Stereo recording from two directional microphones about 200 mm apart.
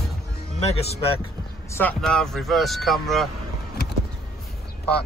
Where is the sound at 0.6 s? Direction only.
30° left (ahead or behind).